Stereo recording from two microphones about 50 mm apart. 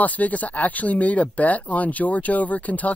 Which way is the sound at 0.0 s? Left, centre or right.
Left.